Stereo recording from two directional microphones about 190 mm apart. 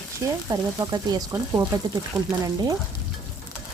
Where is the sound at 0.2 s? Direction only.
20° right (ahead or behind).